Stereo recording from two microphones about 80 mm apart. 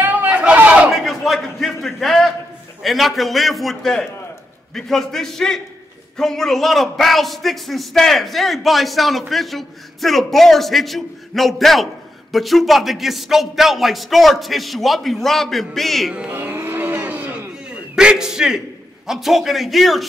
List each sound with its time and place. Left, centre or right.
0.0 s a sound: right
0.8 s a sound: centre
2.8 s a man's voice: centre
16.1 s speech: centre
16.3 s cattle: right
17.6 s a man's voice: centre